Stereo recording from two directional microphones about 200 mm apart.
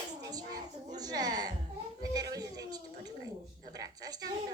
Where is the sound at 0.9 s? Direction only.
20° right (ahead or behind).